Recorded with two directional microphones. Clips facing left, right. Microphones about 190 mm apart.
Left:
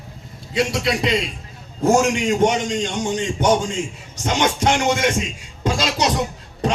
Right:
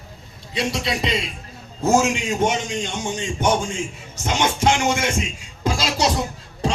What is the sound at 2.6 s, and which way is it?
Speech, 75° left (ahead or behind).